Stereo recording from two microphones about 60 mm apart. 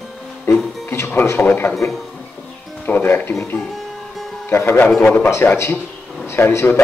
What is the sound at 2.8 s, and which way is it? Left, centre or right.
Speech, left.